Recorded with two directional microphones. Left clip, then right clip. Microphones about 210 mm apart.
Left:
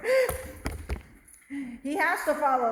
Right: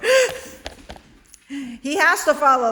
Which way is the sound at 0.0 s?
35° right (ahead or behind).